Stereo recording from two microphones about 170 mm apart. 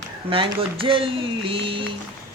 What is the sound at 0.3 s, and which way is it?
Speech, 30° right (ahead or behind).